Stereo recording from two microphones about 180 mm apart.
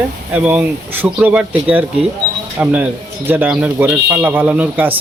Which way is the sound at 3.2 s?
10° right (ahead or behind).